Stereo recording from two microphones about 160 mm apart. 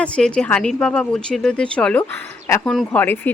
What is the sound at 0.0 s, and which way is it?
A woman's voice, 5° left (ahead or behind).